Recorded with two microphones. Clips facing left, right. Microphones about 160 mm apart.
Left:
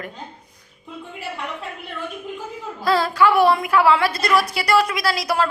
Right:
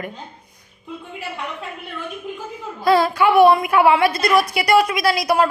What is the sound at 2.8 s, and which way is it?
A woman's voice, 15° right (ahead or behind).